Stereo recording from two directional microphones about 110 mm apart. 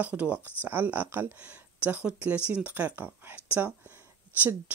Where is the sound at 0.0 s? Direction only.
10° right (ahead or behind).